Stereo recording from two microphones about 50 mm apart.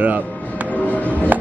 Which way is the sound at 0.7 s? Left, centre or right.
Left.